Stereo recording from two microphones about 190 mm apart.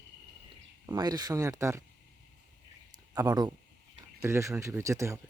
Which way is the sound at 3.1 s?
20° right (ahead or behind).